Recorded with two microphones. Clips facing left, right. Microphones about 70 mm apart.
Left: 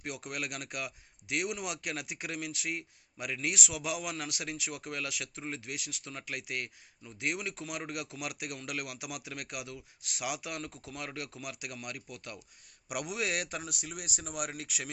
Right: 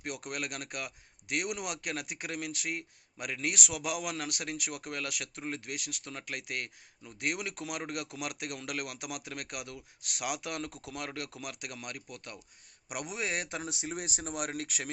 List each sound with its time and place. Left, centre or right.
0.0 s a man's voice: right
14.5 s a man's voice: right